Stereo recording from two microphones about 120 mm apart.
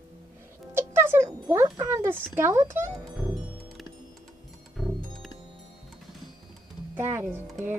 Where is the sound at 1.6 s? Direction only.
25° right (ahead or behind).